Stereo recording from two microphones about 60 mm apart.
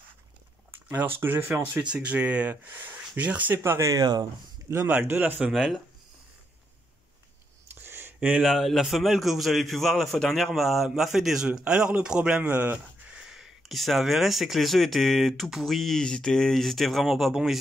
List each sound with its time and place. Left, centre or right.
0.9 s speech: right
1.5 s speech: centre
3.5 s speech: right
4.8 s speech: right
5.4 s a man's voice: centre
7.6 s a sound: right
8.4 s a man's voice: centre
12.4 s speech: right
13.1 s a man's voice: centre